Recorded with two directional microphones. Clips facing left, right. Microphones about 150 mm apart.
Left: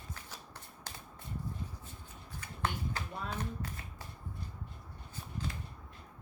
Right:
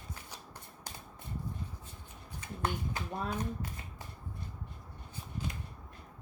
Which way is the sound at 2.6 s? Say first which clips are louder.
Right 1 dB; 15° right (ahead or behind).